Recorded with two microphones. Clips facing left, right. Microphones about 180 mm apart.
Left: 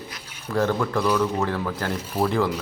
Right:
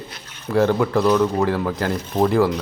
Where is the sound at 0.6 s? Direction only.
30° right (ahead or behind).